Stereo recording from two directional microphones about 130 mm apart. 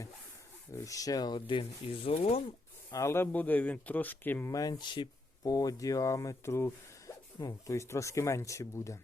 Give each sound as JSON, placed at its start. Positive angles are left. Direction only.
{"t": 0.7, "sound": "speech", "side_deg": 25}
{"t": 2.9, "sound": "speech", "side_deg": 20}
{"t": 4.5, "sound": "speech", "side_deg": 30}